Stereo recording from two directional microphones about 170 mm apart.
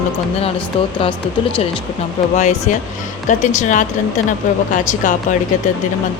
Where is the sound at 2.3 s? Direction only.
45° left (ahead or behind).